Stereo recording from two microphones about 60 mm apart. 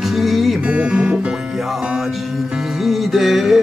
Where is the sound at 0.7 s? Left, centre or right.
Centre.